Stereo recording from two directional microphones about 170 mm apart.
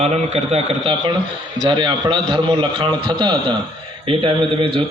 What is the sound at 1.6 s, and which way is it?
A man's voice, 30° right (ahead or behind).